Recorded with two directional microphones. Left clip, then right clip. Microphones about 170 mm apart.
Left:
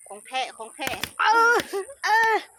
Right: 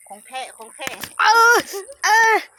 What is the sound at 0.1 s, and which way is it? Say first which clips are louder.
Speech: left 2 dB; 50° left (ahead or behind).